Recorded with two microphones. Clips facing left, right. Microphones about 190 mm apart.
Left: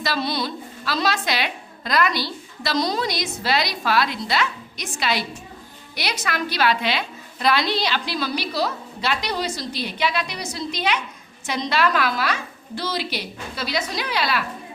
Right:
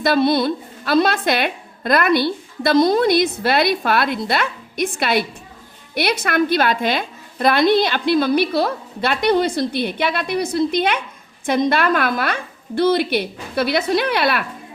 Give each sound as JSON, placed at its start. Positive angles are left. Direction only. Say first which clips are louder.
{"t": 0.0, "sound": "a woman's voice", "louder": "right 9 dB", "side_deg": -55}